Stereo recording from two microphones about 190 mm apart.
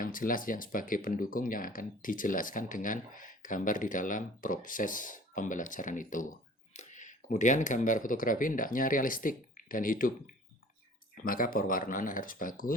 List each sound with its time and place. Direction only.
0.0 s speech: 45° left (ahead or behind)